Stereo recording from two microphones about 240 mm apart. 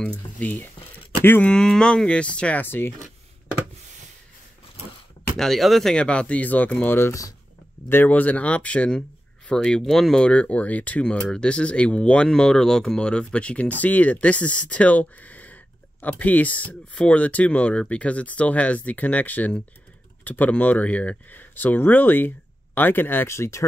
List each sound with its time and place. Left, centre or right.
0.0 s speech: centre
5.4 s speech: centre